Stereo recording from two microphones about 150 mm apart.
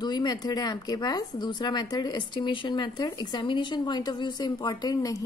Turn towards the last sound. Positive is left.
turn(degrees=25)  # may be behind; listen again after turning